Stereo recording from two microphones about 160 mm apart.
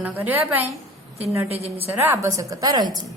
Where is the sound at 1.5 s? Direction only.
40° right (ahead or behind).